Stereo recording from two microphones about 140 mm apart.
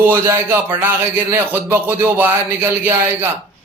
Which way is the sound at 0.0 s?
20° right (ahead or behind).